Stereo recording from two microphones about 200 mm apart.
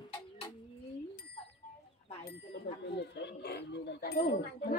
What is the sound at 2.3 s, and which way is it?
Speech, 55° left (ahead or behind).